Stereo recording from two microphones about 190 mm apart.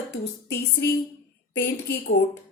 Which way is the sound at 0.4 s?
65° left (ahead or behind).